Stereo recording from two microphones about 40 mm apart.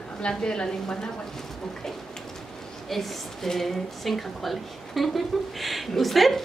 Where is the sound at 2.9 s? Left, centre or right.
Centre.